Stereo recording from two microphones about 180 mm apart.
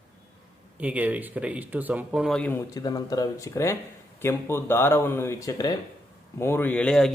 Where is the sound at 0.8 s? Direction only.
10° right (ahead or behind).